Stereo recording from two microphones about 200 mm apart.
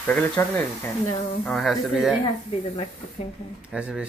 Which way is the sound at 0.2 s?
10° left (ahead or behind).